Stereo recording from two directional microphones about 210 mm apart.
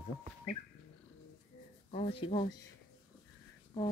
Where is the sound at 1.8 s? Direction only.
25° left (ahead or behind).